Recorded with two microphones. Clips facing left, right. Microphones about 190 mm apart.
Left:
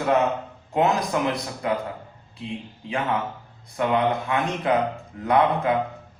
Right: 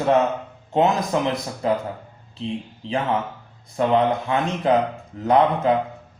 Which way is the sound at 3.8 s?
25° right (ahead or behind).